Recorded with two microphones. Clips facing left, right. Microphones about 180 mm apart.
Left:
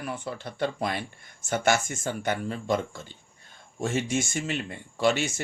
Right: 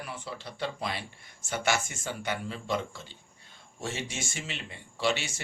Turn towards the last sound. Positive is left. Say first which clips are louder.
# left 5 dB
turn(degrees=45)  # may be behind; listen again after turning